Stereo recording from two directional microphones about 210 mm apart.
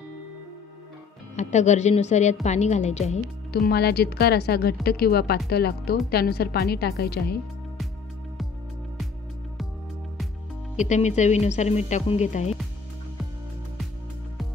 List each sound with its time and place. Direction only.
1.3 s speech: 35° left (ahead or behind)
3.5 s a woman's voice: 50° left (ahead or behind)
10.8 s speech: 35° left (ahead or behind)